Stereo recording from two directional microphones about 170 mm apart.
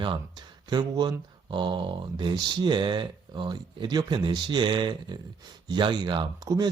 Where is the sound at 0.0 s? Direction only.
25° right (ahead or behind).